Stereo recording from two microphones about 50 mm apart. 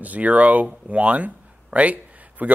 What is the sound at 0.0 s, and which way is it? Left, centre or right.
Speech, right.